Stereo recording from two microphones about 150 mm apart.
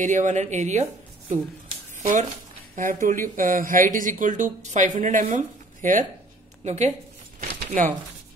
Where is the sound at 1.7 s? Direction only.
50° right (ahead or behind).